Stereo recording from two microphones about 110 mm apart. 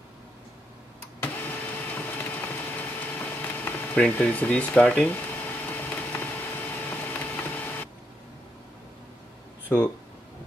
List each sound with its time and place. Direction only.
1.2 s vehicle: 15° left (ahead or behind)
6.7 s printer: 15° left (ahead or behind)
9.7 s speech: 15° left (ahead or behind)